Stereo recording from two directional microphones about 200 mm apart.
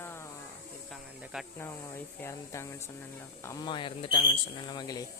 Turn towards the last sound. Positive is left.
turn(degrees=20)  # may be behind; listen again after turning